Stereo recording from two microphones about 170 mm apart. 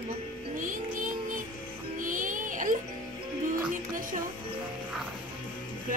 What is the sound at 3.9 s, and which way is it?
Speech, 55° right (ahead or behind).